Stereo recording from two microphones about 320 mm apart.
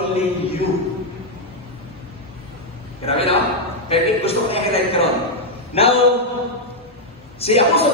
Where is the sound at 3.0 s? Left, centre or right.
Centre.